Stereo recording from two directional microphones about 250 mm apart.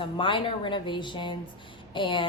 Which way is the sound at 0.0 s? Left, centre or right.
Centre.